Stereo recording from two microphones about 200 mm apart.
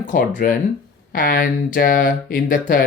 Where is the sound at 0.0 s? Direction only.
40° left (ahead or behind).